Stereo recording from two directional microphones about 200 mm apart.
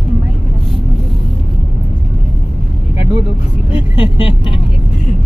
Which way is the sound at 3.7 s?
25° left (ahead or behind).